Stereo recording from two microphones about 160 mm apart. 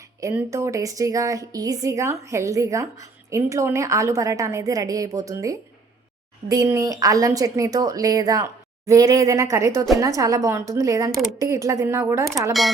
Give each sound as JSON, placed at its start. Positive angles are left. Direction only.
{"t": 0.3, "sound": "a woman's voice", "side_deg": -15}
{"t": 11.1, "sound": "speech", "side_deg": 0}
{"t": 11.3, "sound": "a woman's voice", "side_deg": -20}